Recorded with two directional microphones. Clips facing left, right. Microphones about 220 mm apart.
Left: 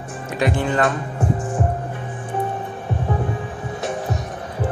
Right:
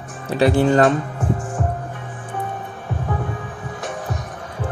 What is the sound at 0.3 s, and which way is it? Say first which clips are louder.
Speech: right 6 dB; 35° right (ahead or behind).